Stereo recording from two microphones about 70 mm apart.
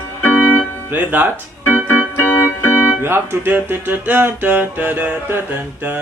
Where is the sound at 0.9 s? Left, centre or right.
Right.